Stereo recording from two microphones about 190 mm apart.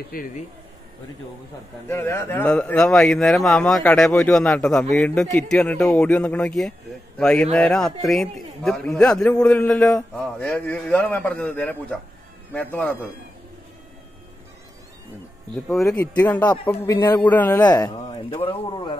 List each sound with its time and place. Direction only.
0.1 s speech: 45° left (ahead or behind)
1.9 s a man's voice: 15° left (ahead or behind)
16.0 s a man's voice: 10° left (ahead or behind)
18.0 s speech: 30° left (ahead or behind)